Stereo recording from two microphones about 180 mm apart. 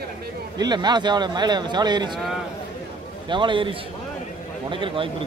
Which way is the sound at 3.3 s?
25° right (ahead or behind).